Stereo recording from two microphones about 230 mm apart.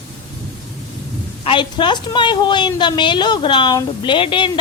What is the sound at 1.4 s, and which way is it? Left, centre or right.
A woman's voice, left.